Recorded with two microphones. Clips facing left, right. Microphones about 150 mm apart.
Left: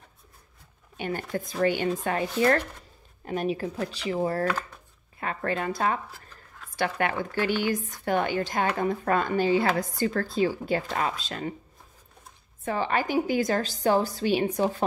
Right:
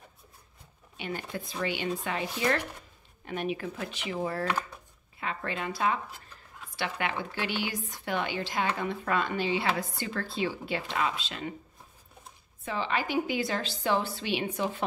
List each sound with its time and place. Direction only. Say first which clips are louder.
0.9 s a woman's voice: left 5 dB; 45° left (ahead or behind)
3.3 s a woman's voice: left 4 dB; 35° left (ahead or behind)
12.6 s a woman's voice: left 4 dB; 45° left (ahead or behind)